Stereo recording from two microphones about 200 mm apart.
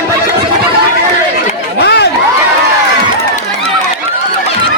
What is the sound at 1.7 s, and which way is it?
Chatter, 55° left (ahead or behind).